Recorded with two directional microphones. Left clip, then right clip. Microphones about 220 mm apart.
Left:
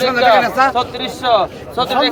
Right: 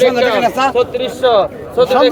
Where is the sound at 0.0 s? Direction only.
25° right (ahead or behind).